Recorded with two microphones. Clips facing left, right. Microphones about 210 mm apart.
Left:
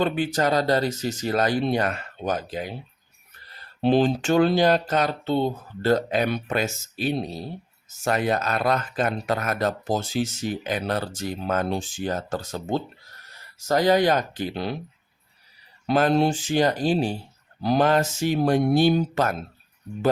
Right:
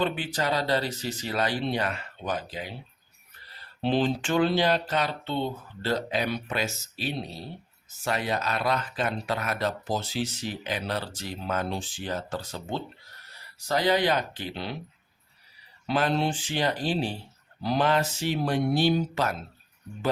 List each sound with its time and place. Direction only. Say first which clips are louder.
0.0 s speech: left 5 dB; 45° left (ahead or behind)
3.8 s speech: left 5 dB; 45° left (ahead or behind)
15.9 s speech: left 6 dB; 45° left (ahead or behind)